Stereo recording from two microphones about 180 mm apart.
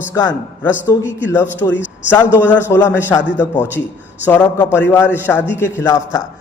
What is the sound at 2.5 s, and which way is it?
Speech, 15° left (ahead or behind).